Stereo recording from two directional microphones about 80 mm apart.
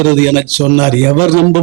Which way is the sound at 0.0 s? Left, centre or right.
Right.